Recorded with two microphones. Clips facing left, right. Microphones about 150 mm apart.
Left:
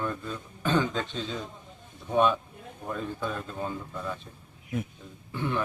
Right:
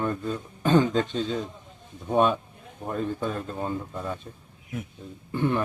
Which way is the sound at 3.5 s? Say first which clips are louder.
Right 3 dB; 25° right (ahead or behind).